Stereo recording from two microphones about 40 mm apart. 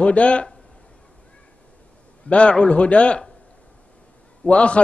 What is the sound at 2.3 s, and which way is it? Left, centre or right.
Speech, left.